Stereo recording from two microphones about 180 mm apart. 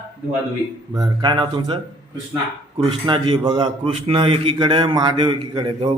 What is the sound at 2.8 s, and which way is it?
Speech, 25° right (ahead or behind).